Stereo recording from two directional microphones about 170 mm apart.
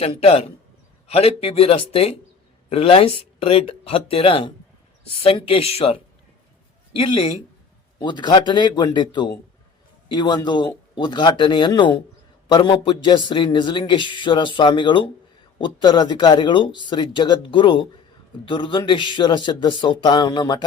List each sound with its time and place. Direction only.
0.0 s a man's voice: 35° left (ahead or behind)